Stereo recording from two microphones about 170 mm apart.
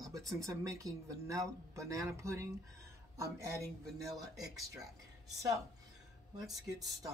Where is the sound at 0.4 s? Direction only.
20° right (ahead or behind).